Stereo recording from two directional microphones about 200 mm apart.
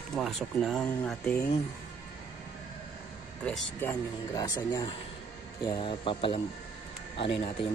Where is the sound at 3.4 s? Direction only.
10° left (ahead or behind); by 6.4 s 25° left (ahead or behind).